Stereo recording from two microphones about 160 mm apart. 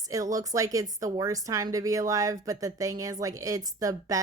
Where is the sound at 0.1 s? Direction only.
20° right (ahead or behind).